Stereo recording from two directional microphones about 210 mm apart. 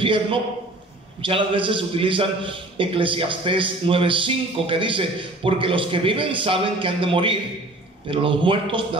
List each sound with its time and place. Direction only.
0.0 s a man's voice: 25° right (ahead or behind)